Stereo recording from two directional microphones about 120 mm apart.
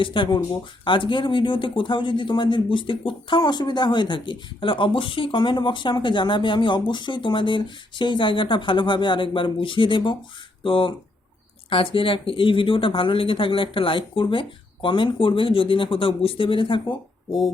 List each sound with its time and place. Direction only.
0.0 s a man's voice: 45° left (ahead or behind)